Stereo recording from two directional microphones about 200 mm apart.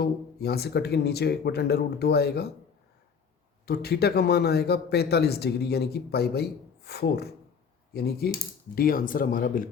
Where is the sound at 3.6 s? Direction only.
50° left (ahead or behind).